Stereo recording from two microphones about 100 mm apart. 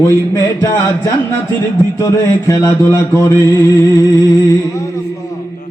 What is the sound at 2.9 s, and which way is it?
Mantra, 25° left (ahead or behind).